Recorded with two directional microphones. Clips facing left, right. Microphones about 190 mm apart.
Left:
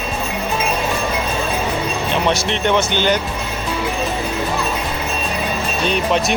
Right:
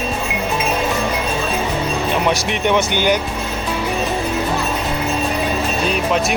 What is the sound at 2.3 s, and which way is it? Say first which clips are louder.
Speech: left 1 dB; 15° right (ahead or behind).